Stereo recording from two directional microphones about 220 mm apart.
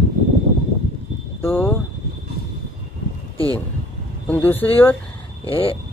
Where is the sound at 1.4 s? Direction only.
10° left (ahead or behind).